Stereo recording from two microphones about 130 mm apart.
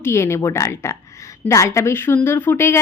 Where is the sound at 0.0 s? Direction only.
20° left (ahead or behind).